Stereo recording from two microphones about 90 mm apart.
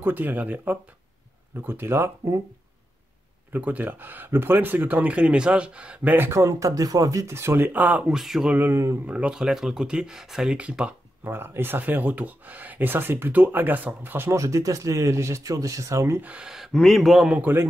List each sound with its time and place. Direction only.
0.0 s speech: 20° right (ahead or behind)
3.5 s speech: 20° right (ahead or behind)
8.0 s a man's voice: 5° right (ahead or behind)
8.5 s speech: 20° right (ahead or behind)
9.0 s speech: 15° right (ahead or behind)
11.2 s speech: 25° right (ahead or behind)
16.2 s a man's voice: 15° right (ahead or behind)
17.3 s speech: 15° right (ahead or behind)